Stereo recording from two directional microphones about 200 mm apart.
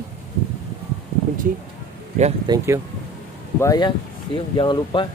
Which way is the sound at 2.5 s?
20° right (ahead or behind).